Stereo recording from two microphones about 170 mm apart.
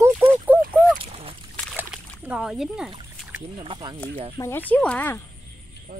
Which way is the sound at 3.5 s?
30° right (ahead or behind).